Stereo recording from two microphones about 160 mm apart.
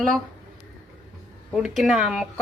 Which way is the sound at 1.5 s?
5° right (ahead or behind).